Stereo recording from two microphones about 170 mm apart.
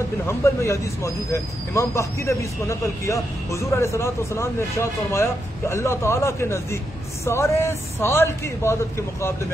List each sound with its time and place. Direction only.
0.3 s speech: 15° left (ahead or behind)